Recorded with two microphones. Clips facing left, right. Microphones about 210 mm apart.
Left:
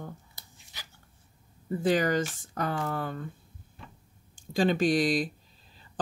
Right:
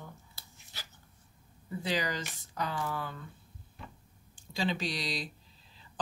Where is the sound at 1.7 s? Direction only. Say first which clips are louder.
Left 8 dB; 50° left (ahead or behind).